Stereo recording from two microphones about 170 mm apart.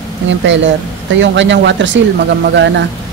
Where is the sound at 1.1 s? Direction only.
90° right.